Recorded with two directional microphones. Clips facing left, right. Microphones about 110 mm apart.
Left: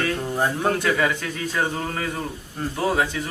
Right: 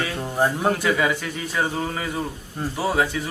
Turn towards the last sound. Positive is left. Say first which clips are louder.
# even
turn(degrees=-5)  # may be behind; listen again after turning